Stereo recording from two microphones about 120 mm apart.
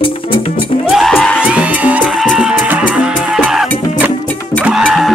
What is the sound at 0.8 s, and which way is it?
Music, centre (ahead or behind).